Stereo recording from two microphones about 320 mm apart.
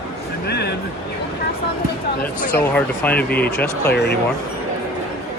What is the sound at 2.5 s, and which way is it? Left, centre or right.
Speech, centre.